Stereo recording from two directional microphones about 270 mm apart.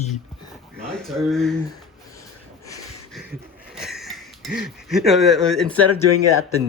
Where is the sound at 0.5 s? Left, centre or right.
Centre.